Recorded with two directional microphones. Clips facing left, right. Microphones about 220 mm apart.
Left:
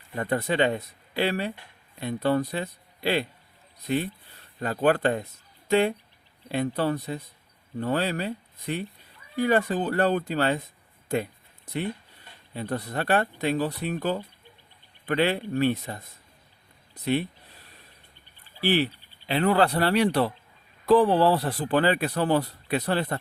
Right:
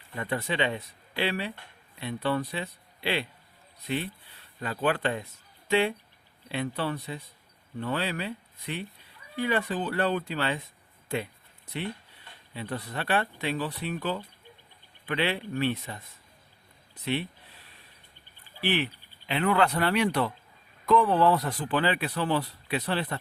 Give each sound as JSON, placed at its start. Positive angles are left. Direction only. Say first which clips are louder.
{"t": 0.2, "sound": "speech", "louder": "left 5 dB", "side_deg": 40}
{"t": 11.1, "sound": "a sound", "louder": "left 5 dB", "side_deg": 45}
{"t": 12.5, "sound": "speech", "louder": "left 5 dB", "side_deg": 45}
{"t": 18.6, "sound": "speech", "louder": "left 5 dB", "side_deg": 35}